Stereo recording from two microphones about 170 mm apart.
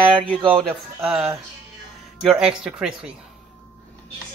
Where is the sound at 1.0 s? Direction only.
Centre (ahead or behind).